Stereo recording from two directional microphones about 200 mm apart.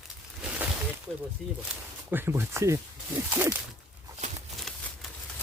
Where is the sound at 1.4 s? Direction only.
5° right (ahead or behind).